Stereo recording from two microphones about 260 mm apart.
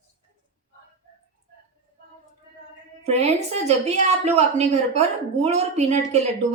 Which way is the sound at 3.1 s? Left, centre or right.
Right.